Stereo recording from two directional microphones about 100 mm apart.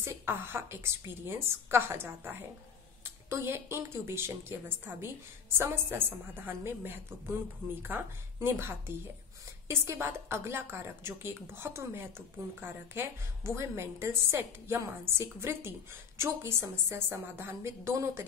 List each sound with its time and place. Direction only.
0.0 s a woman's voice: 25° right (ahead or behind)